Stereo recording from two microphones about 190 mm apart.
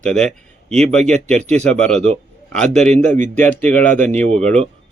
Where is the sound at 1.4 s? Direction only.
35° right (ahead or behind).